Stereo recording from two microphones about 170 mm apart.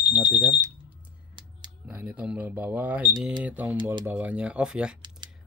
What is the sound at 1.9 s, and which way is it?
Speech, 10° right (ahead or behind).